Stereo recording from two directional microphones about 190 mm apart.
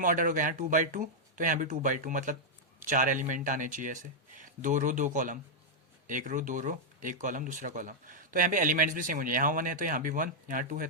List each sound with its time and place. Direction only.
0.0 s speech: 45° right (ahead or behind)